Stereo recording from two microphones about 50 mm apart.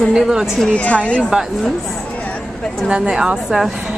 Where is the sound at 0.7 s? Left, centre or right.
Left.